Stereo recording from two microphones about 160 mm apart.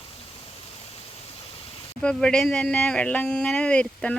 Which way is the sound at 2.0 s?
5° left (ahead or behind).